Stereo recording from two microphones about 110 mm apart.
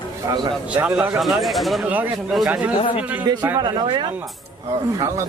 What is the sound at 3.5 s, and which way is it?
Speech, 40° right (ahead or behind).